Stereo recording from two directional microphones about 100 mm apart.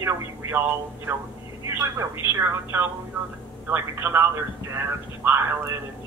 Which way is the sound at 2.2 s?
25° right (ahead or behind).